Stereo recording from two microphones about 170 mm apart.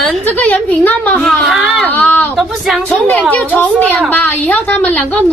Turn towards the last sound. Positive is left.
turn(degrees=10)  # may be behind; listen again after turning